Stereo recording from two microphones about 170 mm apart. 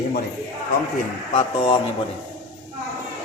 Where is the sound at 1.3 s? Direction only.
35° left (ahead or behind).